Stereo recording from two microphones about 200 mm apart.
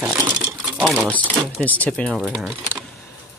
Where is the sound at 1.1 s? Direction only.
10° left (ahead or behind).